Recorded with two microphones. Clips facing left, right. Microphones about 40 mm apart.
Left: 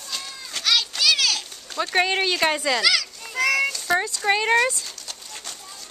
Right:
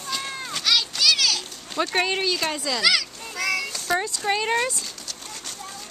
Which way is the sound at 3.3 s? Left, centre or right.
Left.